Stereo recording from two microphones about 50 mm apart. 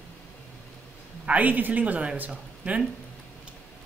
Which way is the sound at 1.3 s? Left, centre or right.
Right.